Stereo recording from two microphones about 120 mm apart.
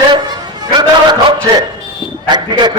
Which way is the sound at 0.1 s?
35° right (ahead or behind).